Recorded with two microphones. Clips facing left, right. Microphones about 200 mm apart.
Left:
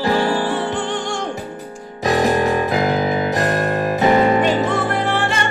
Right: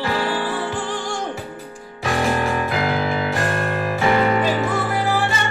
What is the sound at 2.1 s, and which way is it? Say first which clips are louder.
Music: left 4 dB; 40° left (ahead or behind).